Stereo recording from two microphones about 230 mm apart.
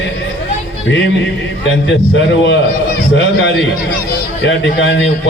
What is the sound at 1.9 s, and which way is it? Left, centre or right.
A man's voice, left.